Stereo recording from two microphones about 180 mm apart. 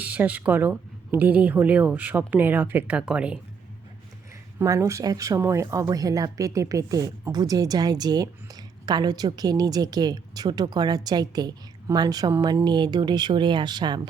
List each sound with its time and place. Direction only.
0.0 s speech: 10° right (ahead or behind)
4.6 s a woman's voice: 15° right (ahead or behind)